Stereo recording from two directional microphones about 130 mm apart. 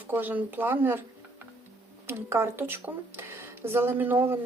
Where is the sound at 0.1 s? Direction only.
15° right (ahead or behind).